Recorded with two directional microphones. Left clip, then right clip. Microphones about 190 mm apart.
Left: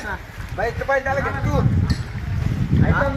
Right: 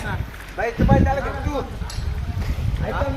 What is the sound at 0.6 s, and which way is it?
Speech, 5° left (ahead or behind).